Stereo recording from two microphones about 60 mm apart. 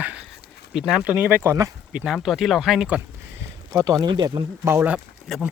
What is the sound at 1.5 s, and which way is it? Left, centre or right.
Speech, right.